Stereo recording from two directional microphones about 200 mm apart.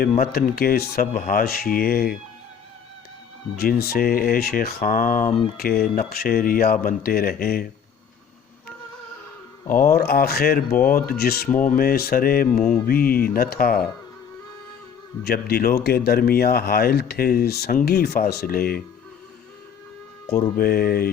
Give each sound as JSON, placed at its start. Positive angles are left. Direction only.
{"t": 0.0, "sound": "speech", "side_deg": 45}
{"t": 3.6, "sound": "speech", "side_deg": 50}
{"t": 9.6, "sound": "speech", "side_deg": 45}
{"t": 15.2, "sound": "speech", "side_deg": 50}
{"t": 20.6, "sound": "speech", "side_deg": 50}